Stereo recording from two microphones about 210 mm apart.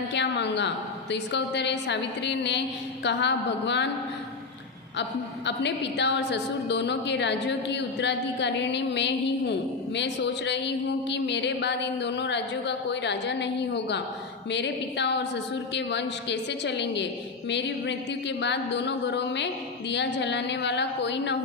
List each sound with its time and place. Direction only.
0.1 s a woman's voice: 55° left (ahead or behind)
4.9 s a woman's voice: 55° left (ahead or behind)